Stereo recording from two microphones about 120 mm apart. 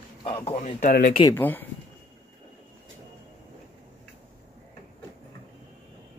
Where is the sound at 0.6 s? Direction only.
85° left.